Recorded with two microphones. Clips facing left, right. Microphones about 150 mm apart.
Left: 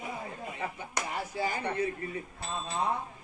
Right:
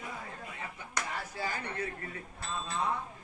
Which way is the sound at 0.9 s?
15° left (ahead or behind).